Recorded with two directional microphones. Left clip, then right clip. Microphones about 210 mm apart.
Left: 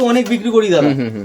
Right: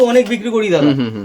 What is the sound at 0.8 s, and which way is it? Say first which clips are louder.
Speech: right 1 dB; 10° right (ahead or behind).